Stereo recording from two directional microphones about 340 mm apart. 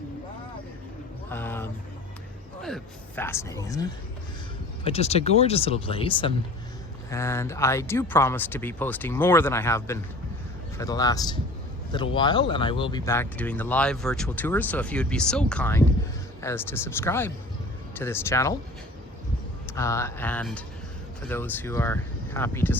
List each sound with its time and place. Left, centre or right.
1.3 s speech: centre
19.6 s speech: centre